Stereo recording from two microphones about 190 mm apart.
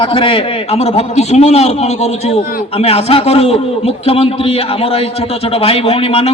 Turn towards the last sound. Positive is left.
turn(degrees=30)  # may be behind; listen again after turning